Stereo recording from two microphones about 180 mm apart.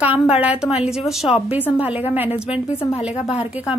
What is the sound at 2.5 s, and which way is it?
Speech, 35° left (ahead or behind).